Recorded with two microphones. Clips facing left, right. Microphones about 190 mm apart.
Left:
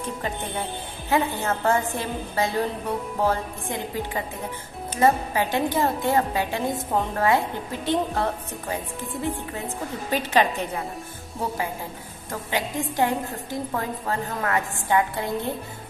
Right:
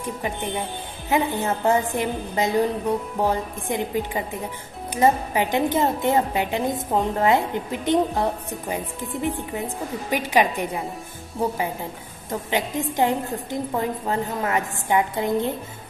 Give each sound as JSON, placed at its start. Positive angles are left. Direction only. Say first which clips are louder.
{"t": 0.2, "sound": "a woman's voice", "louder": "right 2 dB", "side_deg": -15}
{"t": 12.3, "sound": "a woman's voice", "louder": "right 3 dB", "side_deg": -20}